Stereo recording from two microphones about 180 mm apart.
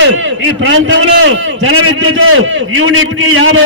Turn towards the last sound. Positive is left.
turn(degrees=-90)